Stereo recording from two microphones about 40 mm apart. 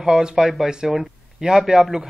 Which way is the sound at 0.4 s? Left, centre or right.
Centre.